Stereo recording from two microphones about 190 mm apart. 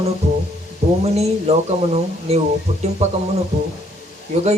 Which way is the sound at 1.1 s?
35° right (ahead or behind).